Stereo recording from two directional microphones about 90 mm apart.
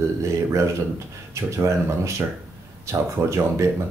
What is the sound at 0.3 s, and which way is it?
Speech, 35° right (ahead or behind).